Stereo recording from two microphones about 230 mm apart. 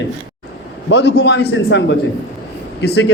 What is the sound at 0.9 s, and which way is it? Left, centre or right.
A man's voice, left.